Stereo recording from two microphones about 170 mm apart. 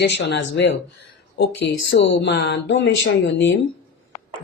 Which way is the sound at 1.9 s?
90° left.